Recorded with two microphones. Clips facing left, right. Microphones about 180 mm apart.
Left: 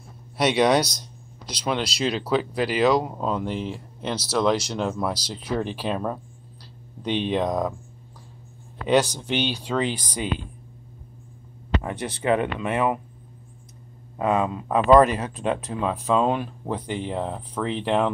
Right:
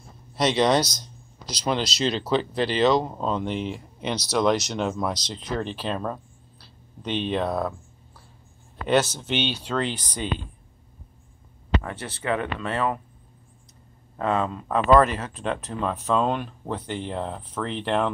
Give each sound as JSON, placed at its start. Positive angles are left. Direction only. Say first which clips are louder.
{"t": 0.4, "sound": "speech", "louder": "left 1 dB", "side_deg": 10}
{"t": 8.8, "sound": "speech", "louder": "left 1 dB", "side_deg": 10}
{"t": 11.8, "sound": "speech", "louder": "left 5 dB", "side_deg": 15}
{"t": 14.1, "sound": "speech", "louder": "left 2 dB", "side_deg": 10}